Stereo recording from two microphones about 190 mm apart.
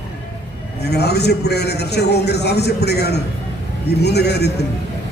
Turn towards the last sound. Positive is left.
turn(degrees=60)  # may be behind; listen again after turning